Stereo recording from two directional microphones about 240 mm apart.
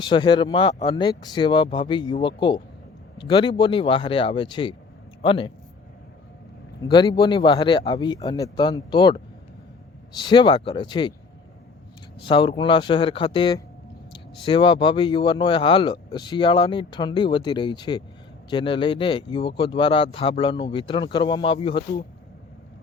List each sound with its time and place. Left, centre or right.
0.0 s a man's voice: centre
6.8 s speech: centre
12.2 s speech: centre